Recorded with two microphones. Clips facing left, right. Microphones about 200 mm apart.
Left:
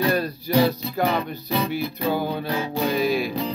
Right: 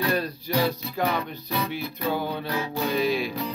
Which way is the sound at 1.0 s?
30° left (ahead or behind).